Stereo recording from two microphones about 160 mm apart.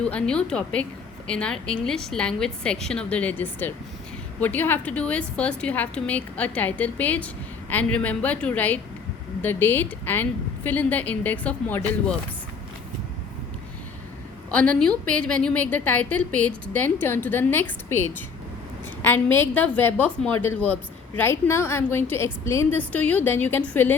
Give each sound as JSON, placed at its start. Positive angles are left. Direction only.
{"t": 0.0, "sound": "a woman's voice", "side_deg": 5}
{"t": 14.5, "sound": "a woman's voice", "side_deg": 5}